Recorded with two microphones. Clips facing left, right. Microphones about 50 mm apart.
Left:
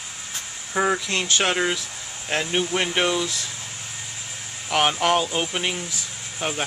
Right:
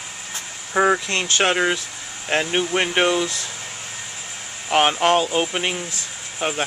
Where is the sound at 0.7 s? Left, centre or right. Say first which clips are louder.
Right 4 dB; centre.